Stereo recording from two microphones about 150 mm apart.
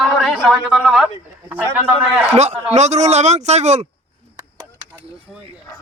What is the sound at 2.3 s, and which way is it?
Speech, 50° right (ahead or behind).